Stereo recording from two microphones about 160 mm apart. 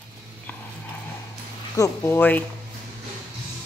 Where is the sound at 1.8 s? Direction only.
15° left (ahead or behind).